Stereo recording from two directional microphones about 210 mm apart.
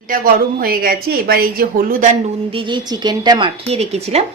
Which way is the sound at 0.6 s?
45° right (ahead or behind).